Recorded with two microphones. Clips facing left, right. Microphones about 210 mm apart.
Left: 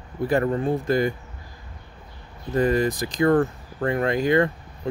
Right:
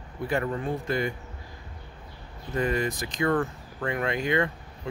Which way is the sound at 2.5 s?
35° left (ahead or behind).